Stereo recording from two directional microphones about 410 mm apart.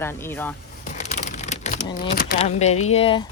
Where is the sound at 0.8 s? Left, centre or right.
Centre.